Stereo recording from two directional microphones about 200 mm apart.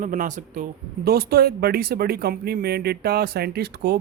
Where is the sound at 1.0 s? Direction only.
50° right (ahead or behind).